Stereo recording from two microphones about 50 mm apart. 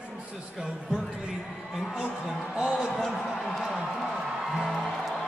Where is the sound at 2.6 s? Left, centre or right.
Centre.